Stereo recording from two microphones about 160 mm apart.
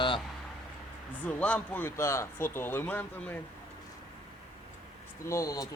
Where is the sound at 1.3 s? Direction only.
5° left (ahead or behind).